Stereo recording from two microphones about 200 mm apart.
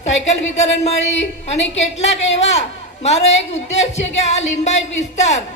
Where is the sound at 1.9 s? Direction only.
30° left (ahead or behind).